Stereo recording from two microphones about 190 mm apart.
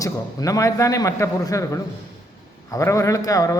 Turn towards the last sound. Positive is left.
turn(degrees=15)  # may be behind; listen again after turning